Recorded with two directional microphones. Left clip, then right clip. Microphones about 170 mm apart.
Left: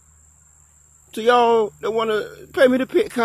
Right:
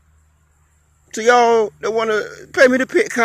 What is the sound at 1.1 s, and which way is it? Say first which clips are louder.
Speech: right 3 dB; 5° right (ahead or behind).